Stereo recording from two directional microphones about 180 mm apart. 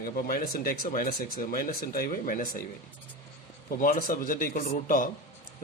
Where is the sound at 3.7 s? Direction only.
50° left (ahead or behind).